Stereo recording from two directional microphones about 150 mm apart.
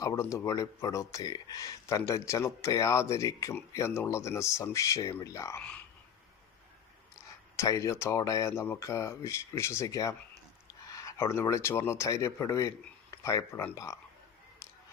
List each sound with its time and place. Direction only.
0.0 s speech: 20° left (ahead or behind)
7.2 s speech: 20° left (ahead or behind)